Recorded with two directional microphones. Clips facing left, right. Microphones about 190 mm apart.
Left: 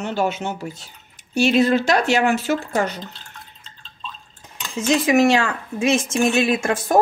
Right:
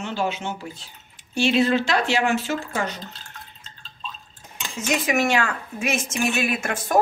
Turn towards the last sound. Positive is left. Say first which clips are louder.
# left 4 dB
turn(degrees=30)  # may be behind; listen again after turning